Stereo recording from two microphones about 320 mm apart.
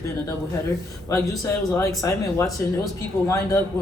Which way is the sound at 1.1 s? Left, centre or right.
Centre.